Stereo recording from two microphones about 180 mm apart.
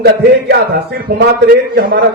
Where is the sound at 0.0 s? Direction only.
60° right (ahead or behind).